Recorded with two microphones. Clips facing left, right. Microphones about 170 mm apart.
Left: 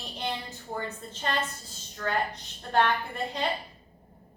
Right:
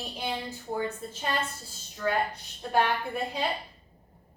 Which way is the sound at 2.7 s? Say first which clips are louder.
Left 1 dB; 10° right (ahead or behind).